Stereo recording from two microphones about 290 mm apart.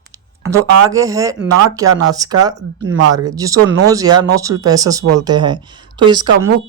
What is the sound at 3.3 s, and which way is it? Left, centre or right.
Speech, centre.